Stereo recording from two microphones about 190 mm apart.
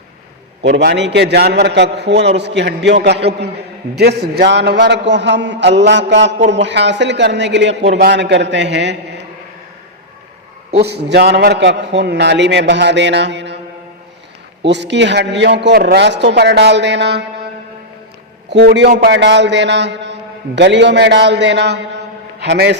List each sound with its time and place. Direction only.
0.6 s a man's voice: 65° right (ahead or behind)
10.8 s a man's voice: 60° right (ahead or behind)
14.6 s a man's voice: 65° right (ahead or behind)
18.4 s a man's voice: 65° right (ahead or behind)